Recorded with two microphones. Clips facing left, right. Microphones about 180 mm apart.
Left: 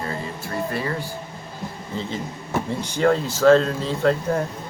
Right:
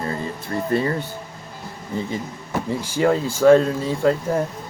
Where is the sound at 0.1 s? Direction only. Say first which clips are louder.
Right 3 dB; 25° right (ahead or behind).